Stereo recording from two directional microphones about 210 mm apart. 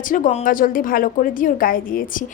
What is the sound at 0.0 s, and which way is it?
A woman's voice, 40° left (ahead or behind).